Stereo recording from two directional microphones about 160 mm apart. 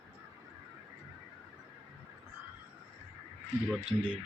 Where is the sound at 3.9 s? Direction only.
10° right (ahead or behind).